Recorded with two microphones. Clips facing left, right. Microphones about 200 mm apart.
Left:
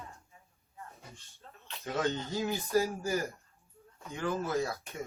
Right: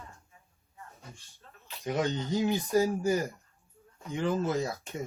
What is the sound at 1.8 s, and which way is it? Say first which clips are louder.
Speech: right 2 dB; 15° right (ahead or behind).